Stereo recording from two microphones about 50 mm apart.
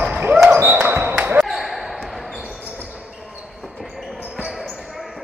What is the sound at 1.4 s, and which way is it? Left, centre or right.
Basketball bounce, centre.